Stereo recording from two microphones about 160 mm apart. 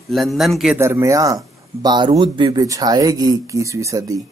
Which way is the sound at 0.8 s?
15° right (ahead or behind).